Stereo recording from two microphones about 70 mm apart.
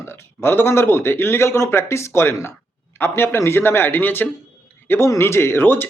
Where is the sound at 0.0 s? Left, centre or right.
Left.